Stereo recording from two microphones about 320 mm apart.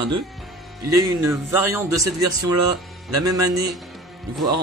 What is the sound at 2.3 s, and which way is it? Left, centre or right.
Speech, right.